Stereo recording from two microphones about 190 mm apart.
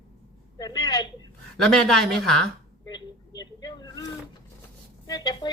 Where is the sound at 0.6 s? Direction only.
20° left (ahead or behind).